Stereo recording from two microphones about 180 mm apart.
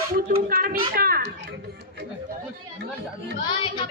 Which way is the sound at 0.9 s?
55° right (ahead or behind).